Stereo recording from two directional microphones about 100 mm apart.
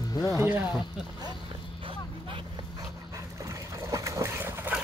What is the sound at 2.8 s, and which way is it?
Dog, 30° right (ahead or behind).